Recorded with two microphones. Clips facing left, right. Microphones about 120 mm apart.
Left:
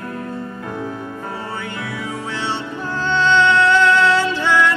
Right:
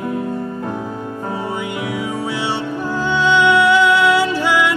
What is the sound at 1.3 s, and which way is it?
Music, 15° right (ahead or behind).